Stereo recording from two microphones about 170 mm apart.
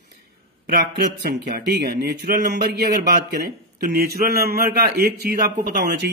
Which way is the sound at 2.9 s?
70° right (ahead or behind).